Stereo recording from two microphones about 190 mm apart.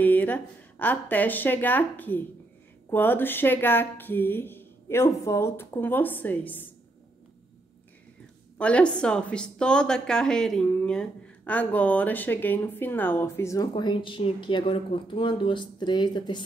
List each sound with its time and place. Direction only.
0.0 s a woman's voice: 10° left (ahead or behind)
8.5 s a woman's voice: 5° left (ahead or behind); by 16.4 s 25° left (ahead or behind)